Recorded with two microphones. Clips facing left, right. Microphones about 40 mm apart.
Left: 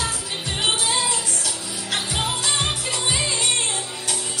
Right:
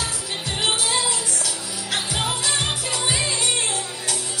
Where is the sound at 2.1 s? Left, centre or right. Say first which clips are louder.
Left 1 dB; centre.